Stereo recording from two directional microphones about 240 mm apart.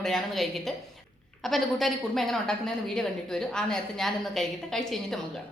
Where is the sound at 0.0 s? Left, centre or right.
Centre.